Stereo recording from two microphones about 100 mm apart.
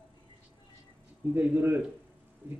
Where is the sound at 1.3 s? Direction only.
20° right (ahead or behind).